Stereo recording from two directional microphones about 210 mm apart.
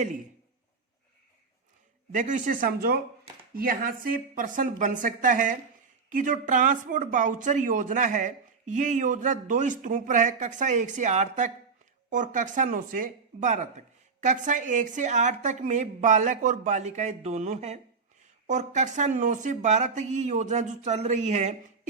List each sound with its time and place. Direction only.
2.1 s speech: 35° right (ahead or behind)